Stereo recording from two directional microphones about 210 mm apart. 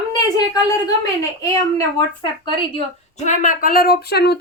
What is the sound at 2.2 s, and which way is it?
A woman's voice, 25° left (ahead or behind).